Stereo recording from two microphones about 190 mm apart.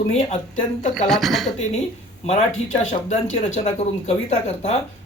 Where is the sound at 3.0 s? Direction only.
30° left (ahead or behind).